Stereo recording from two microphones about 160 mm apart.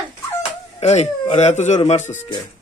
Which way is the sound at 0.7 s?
40° left (ahead or behind).